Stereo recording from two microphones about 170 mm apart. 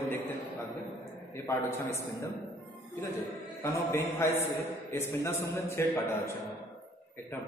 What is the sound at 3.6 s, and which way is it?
A man's voice, 15° left (ahead or behind).